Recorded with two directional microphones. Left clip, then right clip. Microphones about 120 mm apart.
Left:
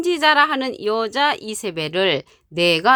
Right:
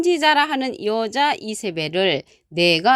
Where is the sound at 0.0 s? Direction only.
20° right (ahead or behind).